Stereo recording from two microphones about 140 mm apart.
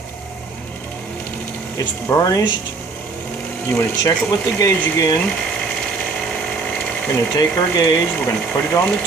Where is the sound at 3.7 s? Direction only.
20° left (ahead or behind).